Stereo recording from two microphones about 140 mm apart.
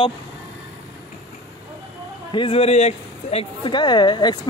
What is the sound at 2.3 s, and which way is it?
Speech, 40° left (ahead or behind).